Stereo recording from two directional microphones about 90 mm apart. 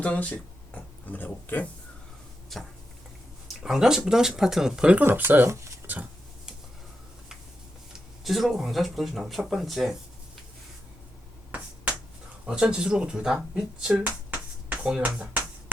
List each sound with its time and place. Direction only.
0.0 s speech: 15° left (ahead or behind)
2.5 s speech: centre (ahead or behind)
5.0 s speech: 25° right (ahead or behind)
5.7 s a sound: 20° right (ahead or behind)
7.9 s speech: centre (ahead or behind)
12.5 s speech: 10° right (ahead or behind)
13.9 s speech: 15° right (ahead or behind)